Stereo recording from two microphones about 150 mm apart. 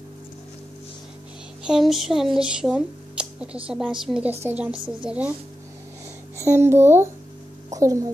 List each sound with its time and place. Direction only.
1.6 s a woman's voice: 5° right (ahead or behind)
6.3 s a child's voice: 15° right (ahead or behind)